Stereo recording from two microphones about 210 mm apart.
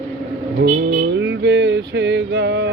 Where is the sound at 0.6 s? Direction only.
50° right (ahead or behind).